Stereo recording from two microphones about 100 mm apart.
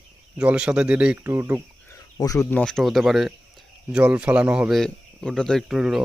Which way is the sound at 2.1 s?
35° left (ahead or behind).